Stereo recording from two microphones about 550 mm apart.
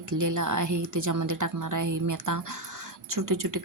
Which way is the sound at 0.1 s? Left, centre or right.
Right.